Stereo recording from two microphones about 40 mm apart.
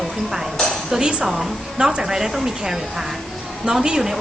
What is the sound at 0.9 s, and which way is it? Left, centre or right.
Dishes, right.